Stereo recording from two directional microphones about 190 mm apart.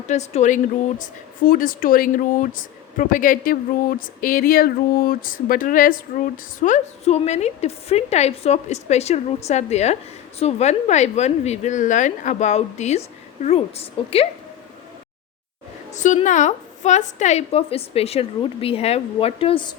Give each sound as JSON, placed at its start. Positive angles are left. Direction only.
{"t": 0.1, "sound": "a woman's voice", "side_deg": 35}
{"t": 15.9, "sound": "a woman's voice", "side_deg": 40}